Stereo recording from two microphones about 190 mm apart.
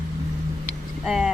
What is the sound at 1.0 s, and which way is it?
Speech, 5° right (ahead or behind).